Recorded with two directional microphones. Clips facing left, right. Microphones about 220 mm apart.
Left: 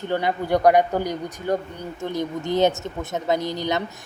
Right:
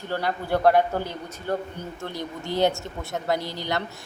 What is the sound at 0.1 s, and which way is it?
A man's voice, 15° left (ahead or behind).